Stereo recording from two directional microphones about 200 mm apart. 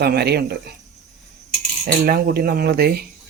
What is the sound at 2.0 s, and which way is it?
Speech, 50° right (ahead or behind).